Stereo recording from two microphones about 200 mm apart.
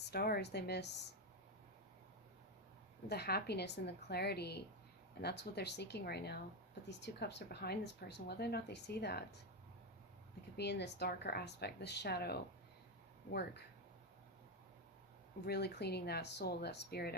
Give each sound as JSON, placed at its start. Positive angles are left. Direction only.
{"t": 0.0, "sound": "speech", "side_deg": 50}
{"t": 3.1, "sound": "speech", "side_deg": 55}
{"t": 10.6, "sound": "speech", "side_deg": 55}
{"t": 15.4, "sound": "speech", "side_deg": 55}